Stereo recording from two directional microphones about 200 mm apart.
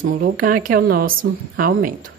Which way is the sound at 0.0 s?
45° right (ahead or behind).